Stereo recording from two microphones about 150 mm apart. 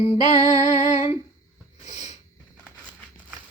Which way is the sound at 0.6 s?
50° left (ahead or behind).